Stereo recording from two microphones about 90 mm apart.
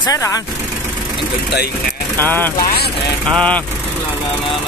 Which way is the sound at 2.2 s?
20° left (ahead or behind).